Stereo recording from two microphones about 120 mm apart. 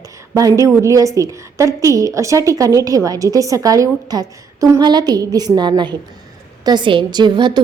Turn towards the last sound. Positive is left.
turn(degrees=-40)  # may be behind; listen again after turning